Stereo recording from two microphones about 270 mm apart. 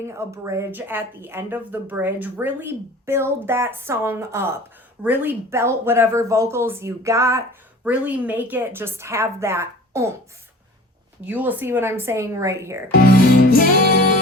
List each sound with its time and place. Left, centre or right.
0.0 s speech: centre
11.3 s speech: centre
13.5 s music: left